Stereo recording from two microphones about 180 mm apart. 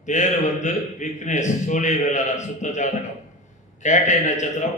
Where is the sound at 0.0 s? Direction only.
40° left (ahead or behind).